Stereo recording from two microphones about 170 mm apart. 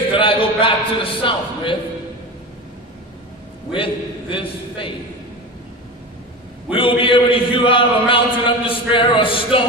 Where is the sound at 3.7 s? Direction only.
30° left (ahead or behind).